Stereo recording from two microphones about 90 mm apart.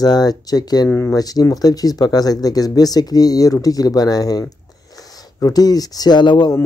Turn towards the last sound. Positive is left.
turn(degrees=55)  # may be behind; listen again after turning